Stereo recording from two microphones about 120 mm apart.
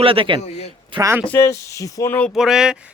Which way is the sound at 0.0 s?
50° right (ahead or behind).